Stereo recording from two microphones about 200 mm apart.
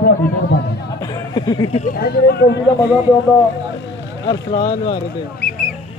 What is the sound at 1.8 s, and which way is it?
Speech, 50° left (ahead or behind).